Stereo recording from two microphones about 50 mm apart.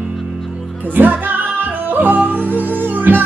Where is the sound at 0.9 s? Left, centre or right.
Right.